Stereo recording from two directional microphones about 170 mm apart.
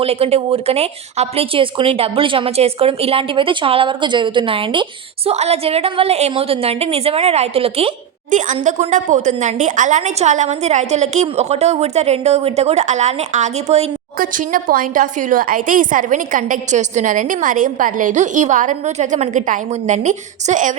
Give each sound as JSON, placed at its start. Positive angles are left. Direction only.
{"t": 0.0, "sound": "speech", "side_deg": -35}
{"t": 8.3, "sound": "a woman's voice", "side_deg": -50}
{"t": 14.2, "sound": "a woman's voice", "side_deg": -55}